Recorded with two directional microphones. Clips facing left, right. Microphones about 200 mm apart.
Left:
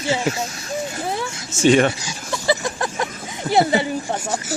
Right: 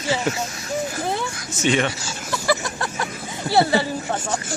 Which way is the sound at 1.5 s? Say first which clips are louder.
Left 6 dB; 25° left (ahead or behind).